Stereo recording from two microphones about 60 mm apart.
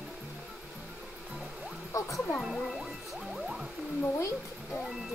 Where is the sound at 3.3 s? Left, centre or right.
Centre.